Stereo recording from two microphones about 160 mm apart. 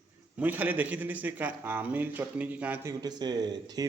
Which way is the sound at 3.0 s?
25° right (ahead or behind).